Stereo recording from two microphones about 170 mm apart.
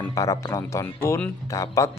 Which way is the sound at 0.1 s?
20° left (ahead or behind).